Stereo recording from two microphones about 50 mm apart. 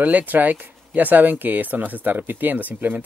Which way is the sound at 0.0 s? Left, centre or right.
Right.